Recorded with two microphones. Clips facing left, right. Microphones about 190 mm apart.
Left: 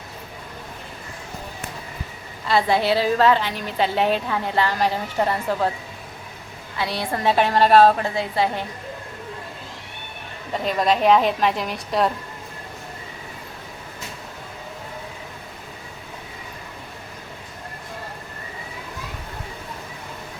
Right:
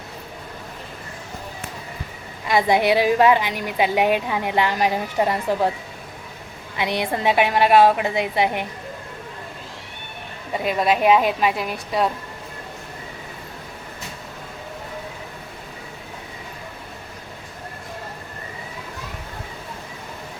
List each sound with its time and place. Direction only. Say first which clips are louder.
2.5 s a woman's voice: right 2 dB; 15° right (ahead or behind)
6.7 s a woman's voice: right 2 dB; 20° right (ahead or behind)
10.5 s a woman's voice: even; 10° right (ahead or behind)